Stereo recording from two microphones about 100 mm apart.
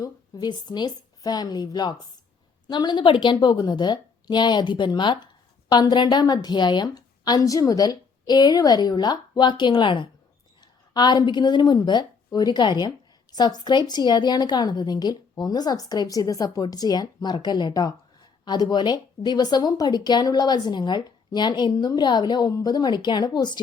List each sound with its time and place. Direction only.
0.0 s a woman's voice: 45° left (ahead or behind)